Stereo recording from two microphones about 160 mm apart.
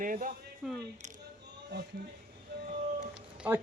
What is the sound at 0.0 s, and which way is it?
Speech, 60° right (ahead or behind).